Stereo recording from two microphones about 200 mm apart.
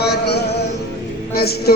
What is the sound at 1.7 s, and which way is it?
Music, 50° left (ahead or behind).